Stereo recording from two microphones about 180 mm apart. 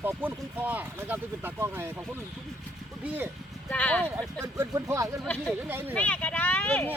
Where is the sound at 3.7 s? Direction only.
10° left (ahead or behind).